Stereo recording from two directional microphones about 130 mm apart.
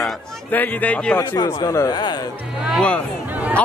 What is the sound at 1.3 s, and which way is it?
Speech, 30° left (ahead or behind).